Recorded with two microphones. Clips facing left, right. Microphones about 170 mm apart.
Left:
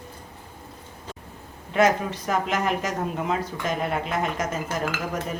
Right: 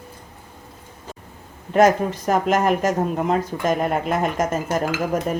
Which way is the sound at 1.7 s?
45° right (ahead or behind).